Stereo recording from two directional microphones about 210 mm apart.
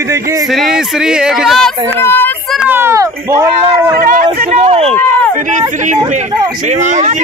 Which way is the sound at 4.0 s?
40° right (ahead or behind).